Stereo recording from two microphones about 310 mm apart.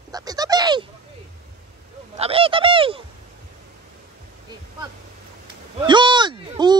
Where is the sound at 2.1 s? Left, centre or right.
Centre.